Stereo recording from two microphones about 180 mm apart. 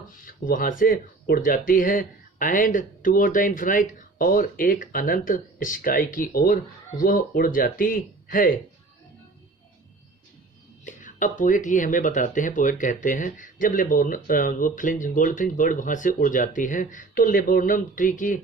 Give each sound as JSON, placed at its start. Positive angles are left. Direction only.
{"t": 0.3, "sound": "speech", "side_deg": 50}
{"t": 10.8, "sound": "speech", "side_deg": 45}